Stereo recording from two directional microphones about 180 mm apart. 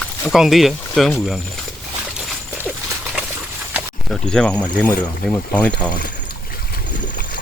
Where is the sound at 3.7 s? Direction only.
Centre (ahead or behind).